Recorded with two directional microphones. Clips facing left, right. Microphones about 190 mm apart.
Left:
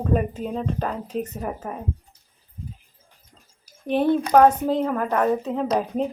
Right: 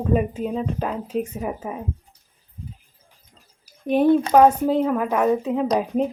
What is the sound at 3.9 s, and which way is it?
Speech, 10° right (ahead or behind).